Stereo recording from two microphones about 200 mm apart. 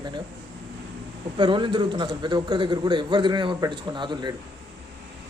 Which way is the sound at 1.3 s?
25° right (ahead or behind).